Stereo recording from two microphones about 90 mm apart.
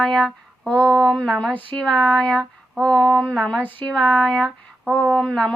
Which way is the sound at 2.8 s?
10° left (ahead or behind).